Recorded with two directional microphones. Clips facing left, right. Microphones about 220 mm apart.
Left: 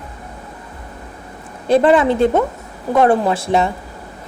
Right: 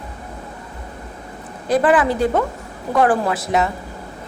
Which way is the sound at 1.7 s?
25° left (ahead or behind).